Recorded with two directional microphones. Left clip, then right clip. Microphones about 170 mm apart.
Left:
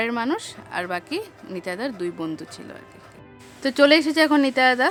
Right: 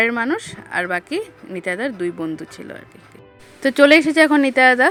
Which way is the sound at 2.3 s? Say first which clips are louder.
Right 4 dB; 15° right (ahead or behind).